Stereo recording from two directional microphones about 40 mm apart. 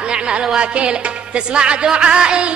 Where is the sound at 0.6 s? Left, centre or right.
Right.